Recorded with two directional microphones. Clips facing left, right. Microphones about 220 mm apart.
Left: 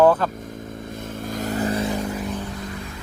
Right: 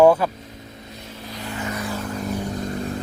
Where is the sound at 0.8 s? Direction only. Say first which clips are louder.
Left 7 dB; 50° left (ahead or behind); by 1.9 s 30° left (ahead or behind).